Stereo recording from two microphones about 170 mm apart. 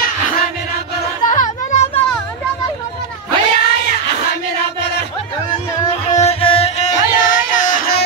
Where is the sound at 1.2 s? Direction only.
45° left (ahead or behind).